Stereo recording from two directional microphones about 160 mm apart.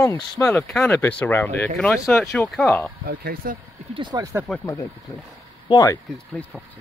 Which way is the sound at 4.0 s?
25° right (ahead or behind).